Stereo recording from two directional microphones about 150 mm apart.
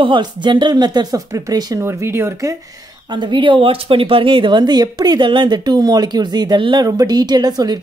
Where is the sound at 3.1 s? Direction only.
30° right (ahead or behind).